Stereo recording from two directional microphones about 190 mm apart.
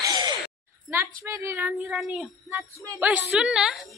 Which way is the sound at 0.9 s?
15° right (ahead or behind).